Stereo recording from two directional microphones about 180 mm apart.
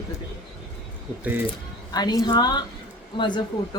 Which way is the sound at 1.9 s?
20° left (ahead or behind).